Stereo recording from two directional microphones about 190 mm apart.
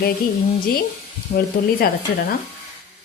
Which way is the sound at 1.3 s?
55° left (ahead or behind).